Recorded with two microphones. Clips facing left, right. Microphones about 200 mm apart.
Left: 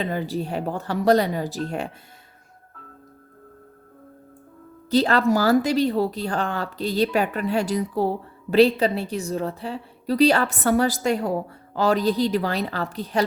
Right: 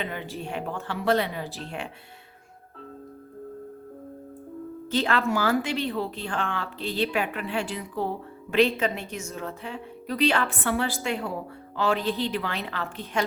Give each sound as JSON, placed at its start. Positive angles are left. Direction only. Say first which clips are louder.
{"t": 0.0, "sound": "speech", "louder": "left 7 dB", "side_deg": 35}
{"t": 4.9, "sound": "speech", "louder": "left 6 dB", "side_deg": 35}